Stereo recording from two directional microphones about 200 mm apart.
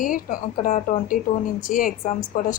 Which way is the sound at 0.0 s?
45° left (ahead or behind).